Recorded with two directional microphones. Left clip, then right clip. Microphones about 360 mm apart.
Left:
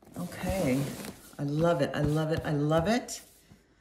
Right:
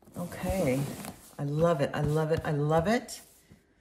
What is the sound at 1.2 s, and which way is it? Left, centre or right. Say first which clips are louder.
Speech: right 1 dB; centre.